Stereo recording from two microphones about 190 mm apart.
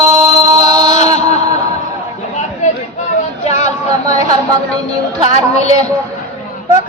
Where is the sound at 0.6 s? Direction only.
20° right (ahead or behind).